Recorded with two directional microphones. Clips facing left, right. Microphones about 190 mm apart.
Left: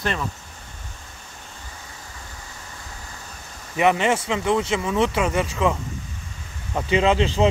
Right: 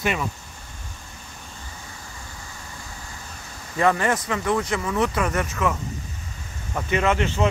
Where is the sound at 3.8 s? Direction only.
20° left (ahead or behind).